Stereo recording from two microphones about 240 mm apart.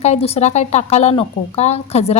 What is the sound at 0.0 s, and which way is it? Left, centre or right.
A woman's voice, left.